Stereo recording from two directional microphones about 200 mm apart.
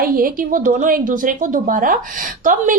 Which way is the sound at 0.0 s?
45° right (ahead or behind).